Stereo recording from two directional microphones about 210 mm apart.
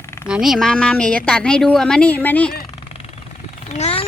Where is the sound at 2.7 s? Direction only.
25° left (ahead or behind).